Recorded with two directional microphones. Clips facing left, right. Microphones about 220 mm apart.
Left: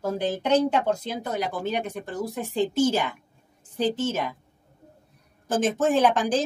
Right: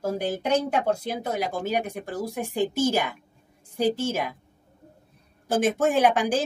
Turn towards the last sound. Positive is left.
turn(degrees=-10)  # may be behind; listen again after turning